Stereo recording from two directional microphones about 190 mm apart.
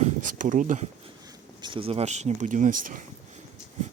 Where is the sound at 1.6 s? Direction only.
25° right (ahead or behind); by 3.0 s 45° right (ahead or behind).